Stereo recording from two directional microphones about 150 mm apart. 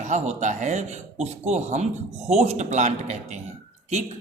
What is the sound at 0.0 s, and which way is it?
Speech, 50° right (ahead or behind).